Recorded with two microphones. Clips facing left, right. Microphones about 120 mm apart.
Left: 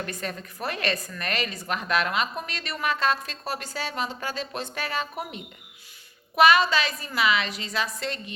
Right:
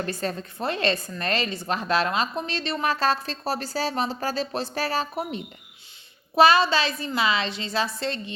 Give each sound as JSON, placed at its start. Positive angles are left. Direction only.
{"t": 0.0, "sound": "a woman's voice", "side_deg": -30}